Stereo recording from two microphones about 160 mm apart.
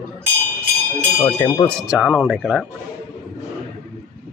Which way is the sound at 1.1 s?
15° left (ahead or behind).